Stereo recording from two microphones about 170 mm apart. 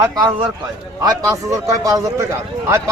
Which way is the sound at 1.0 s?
20° right (ahead or behind).